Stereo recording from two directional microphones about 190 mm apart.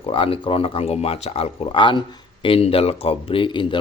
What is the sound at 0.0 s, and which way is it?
Speech, 30° left (ahead or behind).